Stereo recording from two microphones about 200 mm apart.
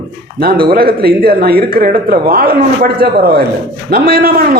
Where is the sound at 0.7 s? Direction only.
50° right (ahead or behind).